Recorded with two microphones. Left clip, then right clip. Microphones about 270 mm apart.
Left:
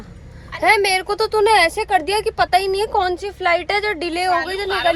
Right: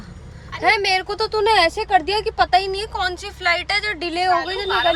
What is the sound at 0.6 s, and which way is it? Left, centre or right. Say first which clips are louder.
A woman's voice: left 2 dB; centre.